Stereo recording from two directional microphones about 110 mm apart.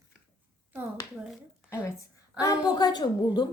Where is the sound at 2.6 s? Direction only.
40° left (ahead or behind).